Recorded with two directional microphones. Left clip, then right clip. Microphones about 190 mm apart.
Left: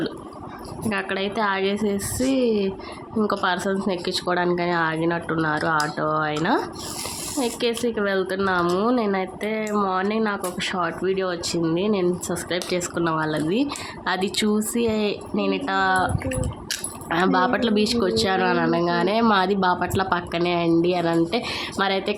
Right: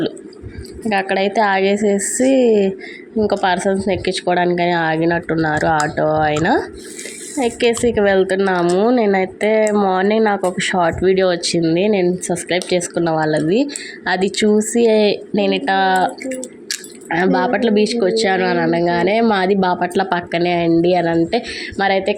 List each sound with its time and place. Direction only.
0.9 s a woman's voice: 20° right (ahead or behind)